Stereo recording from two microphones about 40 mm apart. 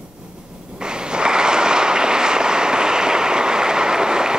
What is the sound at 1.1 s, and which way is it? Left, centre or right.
Vehicle, right.